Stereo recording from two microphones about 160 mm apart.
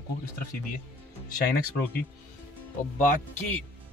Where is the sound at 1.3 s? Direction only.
75° left (ahead or behind).